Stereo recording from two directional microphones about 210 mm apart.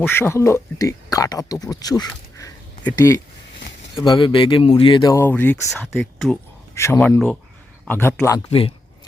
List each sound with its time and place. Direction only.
0.0 s speech: 10° left (ahead or behind)
2.4 s a sound: 15° left (ahead or behind)
4.0 s speech: 20° left (ahead or behind); by 6.4 s centre (ahead or behind)
6.7 s speech: 15° left (ahead or behind)
8.4 s speech: 25° left (ahead or behind)